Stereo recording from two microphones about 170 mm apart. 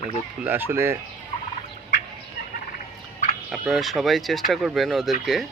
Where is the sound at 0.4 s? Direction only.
10° right (ahead or behind).